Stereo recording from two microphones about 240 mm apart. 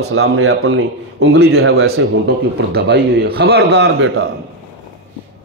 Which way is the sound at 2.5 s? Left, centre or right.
Right.